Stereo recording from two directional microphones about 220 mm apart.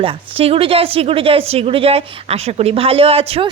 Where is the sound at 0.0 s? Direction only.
25° right (ahead or behind).